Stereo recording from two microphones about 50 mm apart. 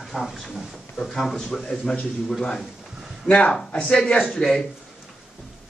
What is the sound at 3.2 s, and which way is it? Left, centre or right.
A man's voice, centre.